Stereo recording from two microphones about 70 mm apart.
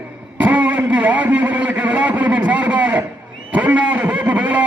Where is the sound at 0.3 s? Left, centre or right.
Right.